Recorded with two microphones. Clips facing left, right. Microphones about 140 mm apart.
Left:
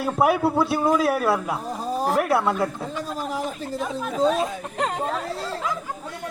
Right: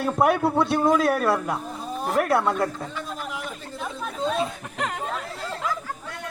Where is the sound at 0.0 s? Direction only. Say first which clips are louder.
Left 1 dB; 5° left (ahead or behind).